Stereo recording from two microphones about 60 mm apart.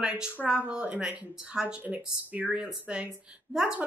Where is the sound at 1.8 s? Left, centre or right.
Right.